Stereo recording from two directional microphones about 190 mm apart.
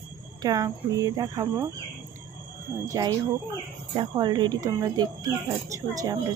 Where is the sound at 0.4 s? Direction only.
20° right (ahead or behind).